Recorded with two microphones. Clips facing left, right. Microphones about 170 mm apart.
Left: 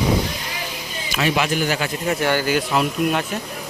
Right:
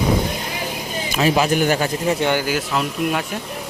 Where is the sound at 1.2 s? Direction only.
35° right (ahead or behind).